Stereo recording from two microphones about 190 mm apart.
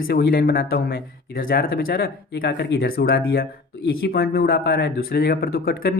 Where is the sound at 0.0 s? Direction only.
55° left (ahead or behind).